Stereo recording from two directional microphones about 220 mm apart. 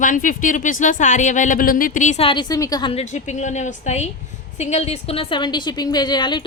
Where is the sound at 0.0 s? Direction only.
35° left (ahead or behind); by 3.0 s 20° left (ahead or behind).